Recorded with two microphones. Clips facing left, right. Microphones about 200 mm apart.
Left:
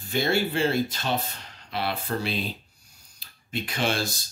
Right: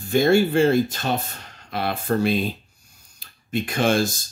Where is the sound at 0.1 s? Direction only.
50° right (ahead or behind).